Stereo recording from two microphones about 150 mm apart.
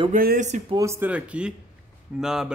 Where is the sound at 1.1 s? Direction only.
5° right (ahead or behind).